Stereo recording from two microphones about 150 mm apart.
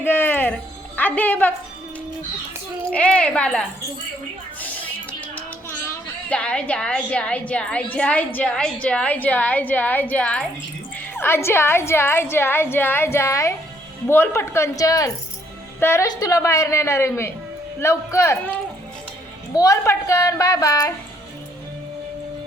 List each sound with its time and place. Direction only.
0.0 s music: 15° left (ahead or behind)
2.9 s a woman's voice: 5° left (ahead or behind)
5.3 s a woman's voice: 15° left (ahead or behind)
19.5 s a woman's voice: 20° left (ahead or behind)